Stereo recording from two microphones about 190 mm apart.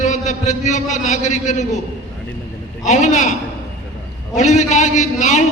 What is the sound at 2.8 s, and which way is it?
Speech, 40° left (ahead or behind).